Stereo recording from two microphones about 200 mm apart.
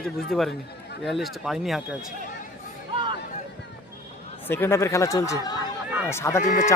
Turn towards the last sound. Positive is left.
turn(degrees=35)  # may be behind; listen again after turning